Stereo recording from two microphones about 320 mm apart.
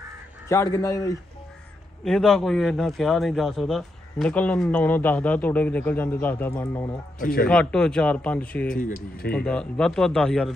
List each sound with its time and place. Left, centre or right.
0.5 s a man's voice: centre
7.2 s speech: left
7.4 s a man's voice: centre
8.7 s speech: left
9.3 s a man's voice: centre